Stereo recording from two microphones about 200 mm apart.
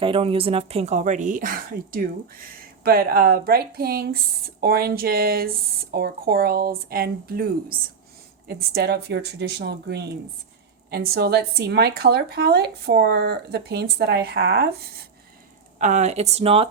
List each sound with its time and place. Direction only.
0.0 s speech: 25° right (ahead or behind); by 7.4 s 50° right (ahead or behind)
8.4 s speech: 50° right (ahead or behind)
15.8 s speech: 35° right (ahead or behind)